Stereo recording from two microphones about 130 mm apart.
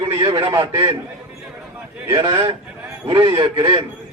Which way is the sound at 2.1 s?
35° right (ahead or behind).